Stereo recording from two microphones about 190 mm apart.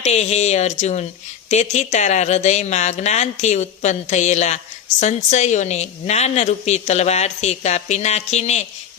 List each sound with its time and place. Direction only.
0.0 s speech: 35° left (ahead or behind)